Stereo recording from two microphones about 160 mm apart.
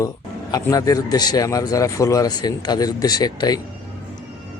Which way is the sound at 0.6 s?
20° left (ahead or behind).